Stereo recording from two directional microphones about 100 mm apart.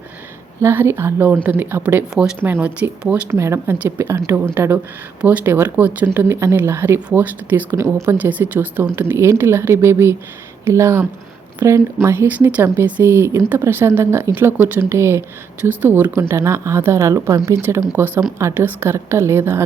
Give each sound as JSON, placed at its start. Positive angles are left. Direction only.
{"t": 0.6, "sound": "speech", "side_deg": -25}
{"t": 3.2, "sound": "speech", "side_deg": -30}
{"t": 7.8, "sound": "speech", "side_deg": -30}